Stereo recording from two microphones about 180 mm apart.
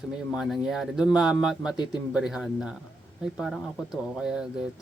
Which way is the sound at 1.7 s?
25° left (ahead or behind).